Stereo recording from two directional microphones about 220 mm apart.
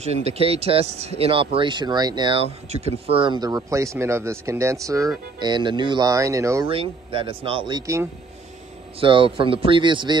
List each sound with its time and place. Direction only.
0.0 s speech: 30° right (ahead or behind)
6.7 s speech: 25° right (ahead or behind)